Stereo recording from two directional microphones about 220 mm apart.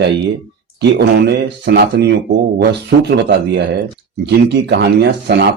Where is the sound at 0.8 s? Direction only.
50° right (ahead or behind).